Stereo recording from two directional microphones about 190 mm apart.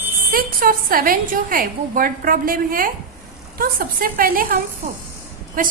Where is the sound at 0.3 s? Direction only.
50° right (ahead or behind).